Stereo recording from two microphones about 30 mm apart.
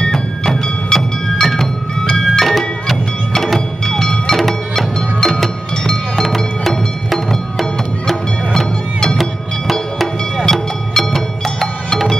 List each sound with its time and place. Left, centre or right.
0.9 s music: centre
8.5 s music: centre
9.2 s music: centre